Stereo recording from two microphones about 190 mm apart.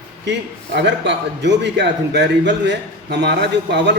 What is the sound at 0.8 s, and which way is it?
A man's voice, 65° right (ahead or behind).